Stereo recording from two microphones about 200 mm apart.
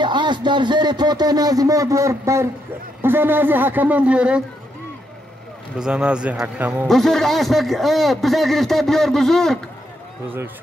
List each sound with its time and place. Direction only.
0.0 s speech: 20° right (ahead or behind); by 4.4 s 5° right (ahead or behind)
5.8 s a man's voice: 5° right (ahead or behind)